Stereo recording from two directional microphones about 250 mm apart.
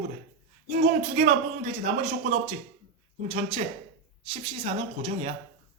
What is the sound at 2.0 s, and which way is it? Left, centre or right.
A woman's voice, right.